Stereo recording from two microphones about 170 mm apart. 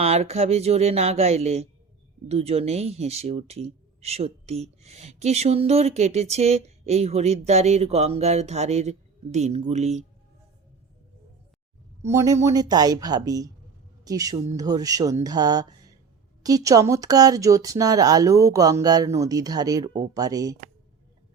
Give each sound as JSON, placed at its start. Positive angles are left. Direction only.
{"t": 0.0, "sound": "speech", "side_deg": -35}
{"t": 12.1, "sound": "speech", "side_deg": -20}